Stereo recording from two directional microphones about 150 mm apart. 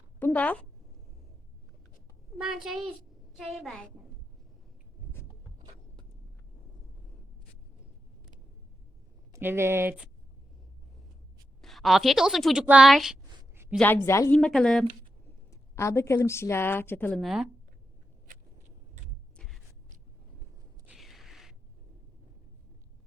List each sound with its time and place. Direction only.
0.2 s a sound: 10° left (ahead or behind)
3.3 s a woman's voice: centre (ahead or behind)
9.3 s speech: 15° right (ahead or behind)
11.6 s a woman's voice: centre (ahead or behind)
13.7 s a woman's voice: 10° left (ahead or behind)
14.3 s a woman's voice: 5° left (ahead or behind)
15.4 s a woman's voice: 20° left (ahead or behind)
17.2 s a woman's voice: centre (ahead or behind)
19.4 s a sound: centre (ahead or behind)
20.8 s a sound: centre (ahead or behind)